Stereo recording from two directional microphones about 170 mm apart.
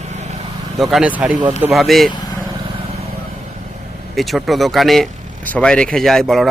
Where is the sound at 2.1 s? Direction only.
25° left (ahead or behind).